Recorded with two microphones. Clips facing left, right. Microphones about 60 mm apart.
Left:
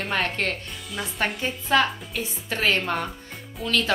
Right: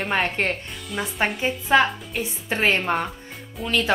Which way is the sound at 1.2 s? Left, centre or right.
Centre.